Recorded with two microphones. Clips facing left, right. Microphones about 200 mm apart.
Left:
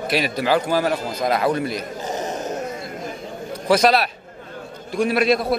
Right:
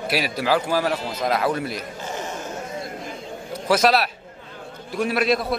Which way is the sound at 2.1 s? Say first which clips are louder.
Left 5 dB; 20° left (ahead or behind).